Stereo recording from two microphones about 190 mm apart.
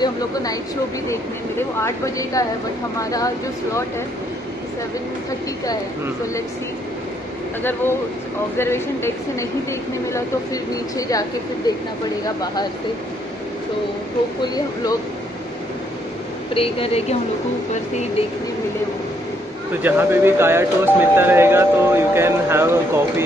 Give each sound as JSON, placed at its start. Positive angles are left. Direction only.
{"t": 0.0, "sound": "speech", "side_deg": 20}
{"t": 1.8, "sound": "a woman's voice", "side_deg": 15}
{"t": 8.5, "sound": "a woman's voice", "side_deg": 15}
{"t": 14.4, "sound": "speech", "side_deg": 20}
{"t": 16.5, "sound": "speech", "side_deg": 30}
{"t": 19.8, "sound": "speech", "side_deg": -10}